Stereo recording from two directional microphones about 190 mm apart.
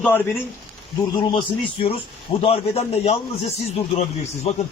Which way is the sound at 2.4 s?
30° left (ahead or behind).